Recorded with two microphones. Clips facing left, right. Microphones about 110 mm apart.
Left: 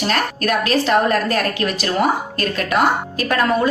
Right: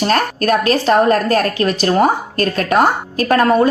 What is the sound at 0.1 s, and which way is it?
Speech, 40° right (ahead or behind).